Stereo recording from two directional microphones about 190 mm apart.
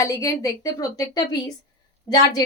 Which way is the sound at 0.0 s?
15° left (ahead or behind).